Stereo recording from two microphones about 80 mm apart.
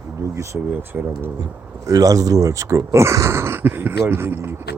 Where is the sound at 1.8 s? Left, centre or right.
Right.